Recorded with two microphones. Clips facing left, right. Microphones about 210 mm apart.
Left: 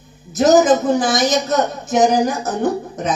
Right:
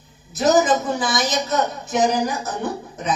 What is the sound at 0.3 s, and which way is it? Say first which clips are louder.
A woman's voice: left 5 dB; 45° left (ahead or behind).